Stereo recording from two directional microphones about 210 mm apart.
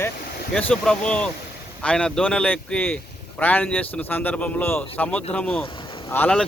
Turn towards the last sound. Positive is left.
turn(degrees=5)  # may be behind; listen again after turning